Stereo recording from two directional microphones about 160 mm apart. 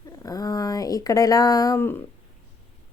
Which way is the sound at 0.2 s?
25° left (ahead or behind).